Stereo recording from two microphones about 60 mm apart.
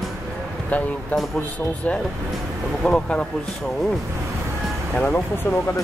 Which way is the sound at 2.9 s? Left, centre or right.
Left.